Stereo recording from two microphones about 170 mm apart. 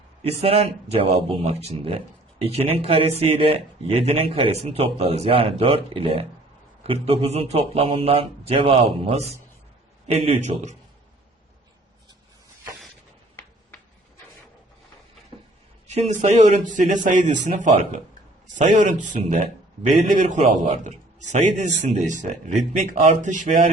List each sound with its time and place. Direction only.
0.2 s speech: 35° right (ahead or behind)
16.7 s a man's voice: 50° right (ahead or behind)